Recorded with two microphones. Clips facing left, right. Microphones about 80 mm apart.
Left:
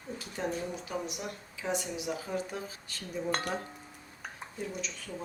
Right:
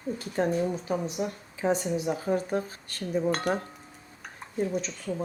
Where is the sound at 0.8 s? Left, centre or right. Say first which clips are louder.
Right 7 dB; right.